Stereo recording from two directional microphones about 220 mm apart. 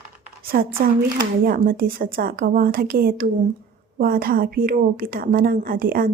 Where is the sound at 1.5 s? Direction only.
40° right (ahead or behind).